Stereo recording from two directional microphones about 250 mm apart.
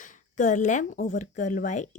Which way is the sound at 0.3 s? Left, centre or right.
Left.